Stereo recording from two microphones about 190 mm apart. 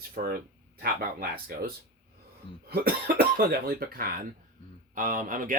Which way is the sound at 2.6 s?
55° right (ahead or behind).